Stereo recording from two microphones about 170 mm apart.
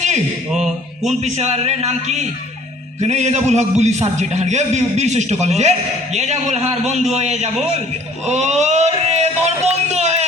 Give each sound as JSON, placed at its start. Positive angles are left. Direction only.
{"t": 0.5, "sound": "mantra", "side_deg": 0}
{"t": 1.2, "sound": "a man's voice", "side_deg": -40}
{"t": 8.2, "sound": "a sound", "side_deg": -40}